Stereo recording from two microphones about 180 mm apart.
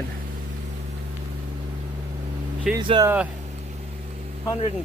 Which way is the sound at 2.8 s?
25° right (ahead or behind).